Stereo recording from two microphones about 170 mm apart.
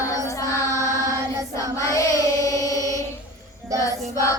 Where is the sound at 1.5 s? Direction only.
20° left (ahead or behind).